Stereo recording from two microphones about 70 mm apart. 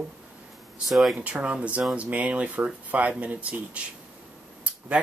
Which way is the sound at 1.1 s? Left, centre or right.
Centre.